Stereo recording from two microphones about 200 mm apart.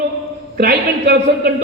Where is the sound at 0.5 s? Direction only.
55° right (ahead or behind).